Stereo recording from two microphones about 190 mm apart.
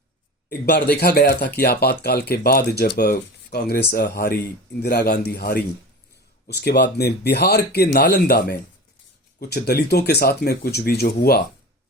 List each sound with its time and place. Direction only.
0.6 s speech: 55° left (ahead or behind)